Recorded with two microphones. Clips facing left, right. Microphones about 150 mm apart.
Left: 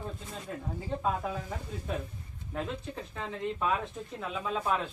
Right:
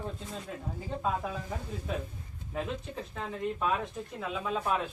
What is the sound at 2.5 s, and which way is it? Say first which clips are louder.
Speech: right 1 dB; 5° right (ahead or behind).